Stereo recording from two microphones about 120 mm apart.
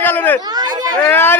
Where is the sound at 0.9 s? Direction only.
15° left (ahead or behind).